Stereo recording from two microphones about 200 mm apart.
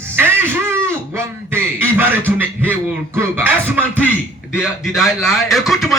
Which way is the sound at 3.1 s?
10° right (ahead or behind).